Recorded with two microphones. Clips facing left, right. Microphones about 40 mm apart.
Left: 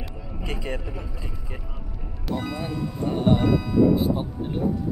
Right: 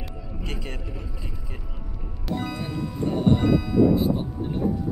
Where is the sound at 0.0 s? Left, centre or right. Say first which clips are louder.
Left 1 dB; centre.